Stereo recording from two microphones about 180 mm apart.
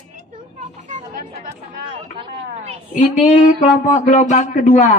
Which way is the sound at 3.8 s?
45° left (ahead or behind).